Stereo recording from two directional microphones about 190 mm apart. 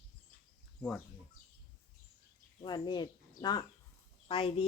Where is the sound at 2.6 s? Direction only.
25° left (ahead or behind).